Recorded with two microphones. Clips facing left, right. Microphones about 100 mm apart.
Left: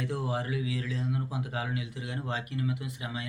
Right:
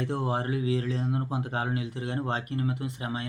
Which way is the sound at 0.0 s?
35° right (ahead or behind).